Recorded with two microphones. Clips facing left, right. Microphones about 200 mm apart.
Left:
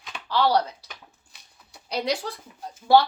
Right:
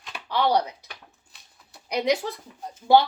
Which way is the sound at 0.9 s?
Centre (ahead or behind).